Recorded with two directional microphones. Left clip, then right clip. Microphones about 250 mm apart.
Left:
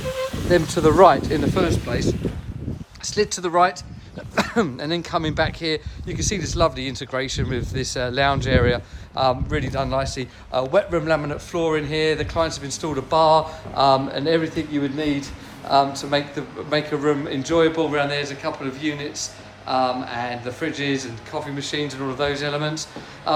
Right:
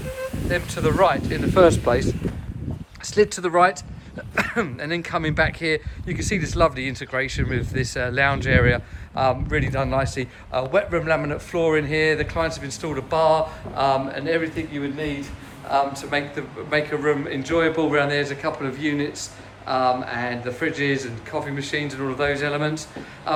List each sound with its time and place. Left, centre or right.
0.5 s speech: left
1.5 s speech: centre